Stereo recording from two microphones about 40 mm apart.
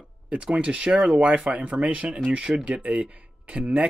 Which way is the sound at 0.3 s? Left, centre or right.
Right.